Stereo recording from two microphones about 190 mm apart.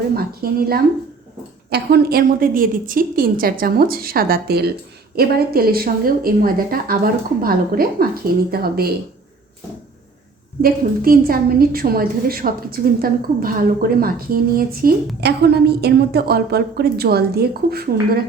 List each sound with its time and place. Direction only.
0.2 s a woman's voice: 50° right (ahead or behind)
10.6 s a woman's voice: 50° right (ahead or behind)